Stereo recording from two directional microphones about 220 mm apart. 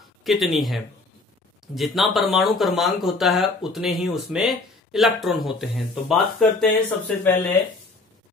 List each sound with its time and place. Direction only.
0.2 s speech: centre (ahead or behind)